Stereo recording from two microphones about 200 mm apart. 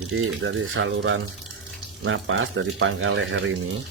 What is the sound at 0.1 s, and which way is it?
Speech, 75° right (ahead or behind).